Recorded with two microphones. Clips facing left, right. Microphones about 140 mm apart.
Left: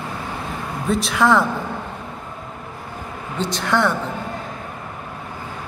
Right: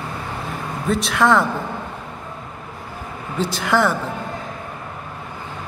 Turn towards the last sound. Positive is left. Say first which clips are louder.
# right 1 dB
turn(degrees=-5)  # may be behind; listen again after turning